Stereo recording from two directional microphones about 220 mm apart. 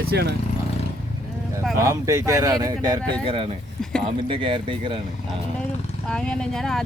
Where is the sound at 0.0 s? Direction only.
45° right (ahead or behind).